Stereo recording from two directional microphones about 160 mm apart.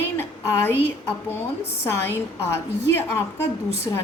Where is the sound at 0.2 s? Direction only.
15° left (ahead or behind).